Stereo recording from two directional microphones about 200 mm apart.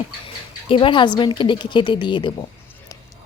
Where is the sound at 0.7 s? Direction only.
25° left (ahead or behind).